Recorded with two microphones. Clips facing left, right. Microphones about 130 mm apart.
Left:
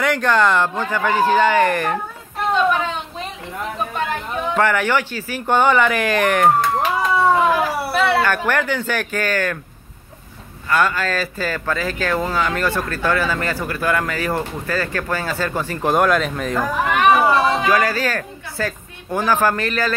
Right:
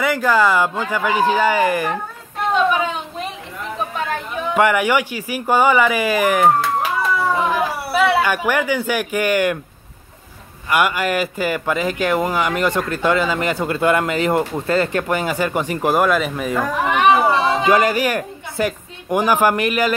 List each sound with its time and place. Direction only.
0.0 s speech: 5° right (ahead or behind)
2.5 s a sound: 5° right (ahead or behind)
4.6 s speech: 10° right (ahead or behind)
10.7 s speech: 15° right (ahead or behind)
15.9 s speech: 5° right (ahead or behind)
16.8 s a woman's voice: 20° right (ahead or behind)